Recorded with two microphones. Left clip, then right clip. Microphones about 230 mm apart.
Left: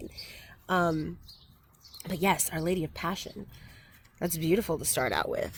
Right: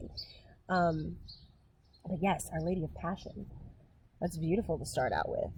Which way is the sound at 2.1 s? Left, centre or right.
Left.